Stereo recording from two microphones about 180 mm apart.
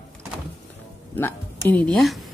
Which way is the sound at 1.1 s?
10° left (ahead or behind).